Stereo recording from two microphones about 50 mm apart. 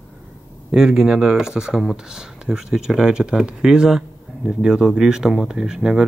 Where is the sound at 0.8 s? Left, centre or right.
Centre.